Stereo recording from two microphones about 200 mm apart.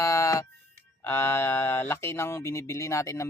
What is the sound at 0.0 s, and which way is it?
Music, 15° left (ahead or behind).